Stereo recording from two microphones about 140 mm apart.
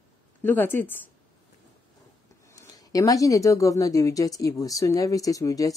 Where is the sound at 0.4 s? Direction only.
15° left (ahead or behind).